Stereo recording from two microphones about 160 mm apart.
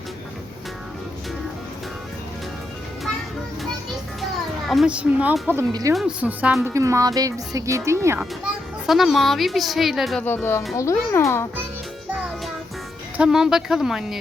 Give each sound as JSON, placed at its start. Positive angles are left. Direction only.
{"t": 4.2, "sound": "a child's voice", "side_deg": 0}
{"t": 8.2, "sound": "a child's voice", "side_deg": 0}
{"t": 10.2, "sound": "a child's voice", "side_deg": 15}
{"t": 13.1, "sound": "speech", "side_deg": -5}